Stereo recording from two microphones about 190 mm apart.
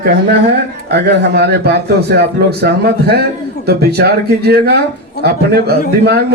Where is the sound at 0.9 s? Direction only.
60° right (ahead or behind).